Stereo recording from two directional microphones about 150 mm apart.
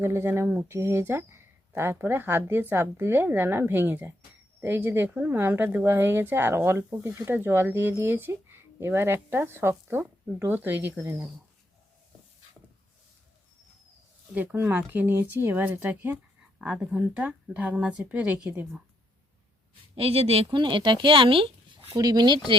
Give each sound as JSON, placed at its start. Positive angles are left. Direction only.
{"t": 0.0, "sound": "a woman's voice", "side_deg": -15}
{"t": 14.3, "sound": "a woman's voice", "side_deg": -15}
{"t": 20.0, "sound": "speech", "side_deg": -40}
{"t": 21.9, "sound": "speech", "side_deg": -25}